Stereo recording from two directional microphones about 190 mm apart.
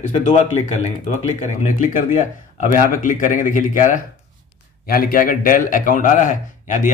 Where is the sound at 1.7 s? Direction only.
45° left (ahead or behind).